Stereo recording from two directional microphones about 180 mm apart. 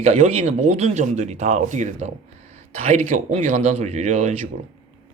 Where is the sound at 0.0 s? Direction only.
35° right (ahead or behind).